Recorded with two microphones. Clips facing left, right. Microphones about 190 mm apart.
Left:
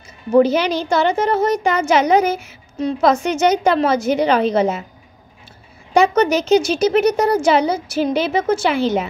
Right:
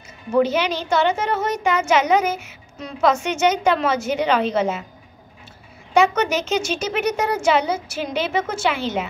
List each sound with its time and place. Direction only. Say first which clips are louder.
0.3 s speech: left 5 dB; 35° left (ahead or behind)
5.9 s speech: left 4 dB; 35° left (ahead or behind)